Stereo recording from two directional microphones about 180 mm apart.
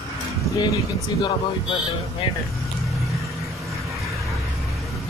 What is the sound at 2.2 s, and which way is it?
Speech, 30° left (ahead or behind).